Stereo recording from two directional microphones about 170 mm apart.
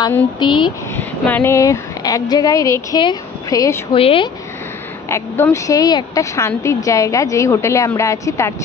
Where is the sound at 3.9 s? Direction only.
35° left (ahead or behind).